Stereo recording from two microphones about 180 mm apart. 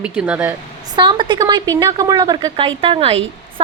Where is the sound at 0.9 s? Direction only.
25° right (ahead or behind).